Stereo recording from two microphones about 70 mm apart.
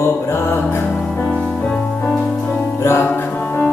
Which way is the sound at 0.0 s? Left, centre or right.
Left.